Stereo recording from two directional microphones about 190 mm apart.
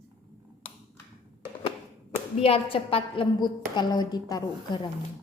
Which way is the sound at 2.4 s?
30° left (ahead or behind).